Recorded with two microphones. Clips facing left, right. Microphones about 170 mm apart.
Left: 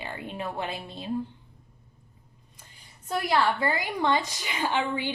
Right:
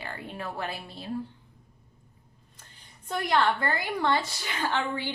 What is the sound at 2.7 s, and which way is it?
A woman's voice, 10° left (ahead or behind).